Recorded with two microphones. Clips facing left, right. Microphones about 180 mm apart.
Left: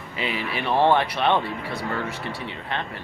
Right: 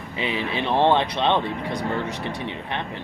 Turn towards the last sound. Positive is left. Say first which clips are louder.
# right 1 dB
turn(degrees=-20)  # may be behind; listen again after turning